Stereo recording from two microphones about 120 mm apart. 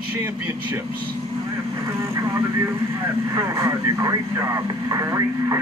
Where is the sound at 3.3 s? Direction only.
25° right (ahead or behind).